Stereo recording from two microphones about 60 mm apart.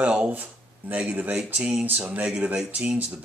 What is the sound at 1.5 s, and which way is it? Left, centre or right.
Speech, centre.